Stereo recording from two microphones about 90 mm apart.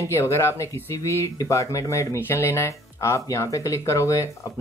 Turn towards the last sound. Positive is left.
turn(degrees=35)  # may be behind; listen again after turning